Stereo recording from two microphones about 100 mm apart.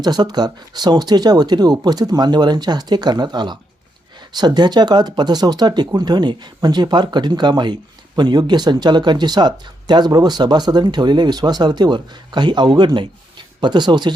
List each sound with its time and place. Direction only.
0.0 s speech: 45° right (ahead or behind)